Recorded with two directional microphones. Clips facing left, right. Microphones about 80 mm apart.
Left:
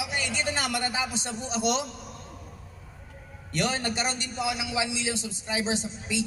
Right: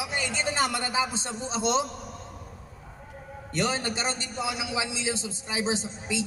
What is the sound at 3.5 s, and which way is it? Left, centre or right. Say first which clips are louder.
A man's voice: even; right.